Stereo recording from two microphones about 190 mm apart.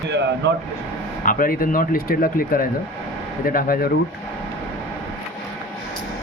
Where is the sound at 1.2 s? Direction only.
45° left (ahead or behind).